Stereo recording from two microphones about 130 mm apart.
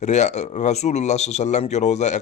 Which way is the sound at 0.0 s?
65° left (ahead or behind).